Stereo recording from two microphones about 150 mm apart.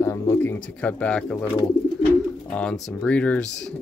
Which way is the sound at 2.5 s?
5° left (ahead or behind).